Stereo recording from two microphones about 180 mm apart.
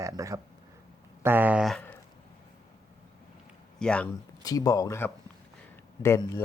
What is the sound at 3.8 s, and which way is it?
Speech, 5° left (ahead or behind).